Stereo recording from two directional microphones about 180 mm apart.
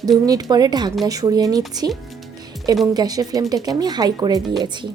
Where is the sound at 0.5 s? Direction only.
20° right (ahead or behind).